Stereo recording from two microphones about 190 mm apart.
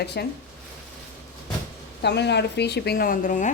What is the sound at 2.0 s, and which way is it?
Speech, 60° left (ahead or behind).